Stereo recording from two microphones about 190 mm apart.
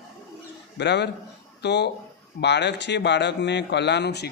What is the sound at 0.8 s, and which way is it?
A man's voice, 65° left (ahead or behind).